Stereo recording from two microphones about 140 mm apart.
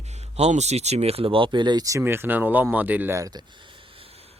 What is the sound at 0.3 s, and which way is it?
Speech, 50° right (ahead or behind).